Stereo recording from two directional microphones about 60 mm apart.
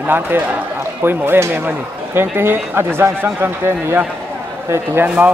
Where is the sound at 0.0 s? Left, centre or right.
Right.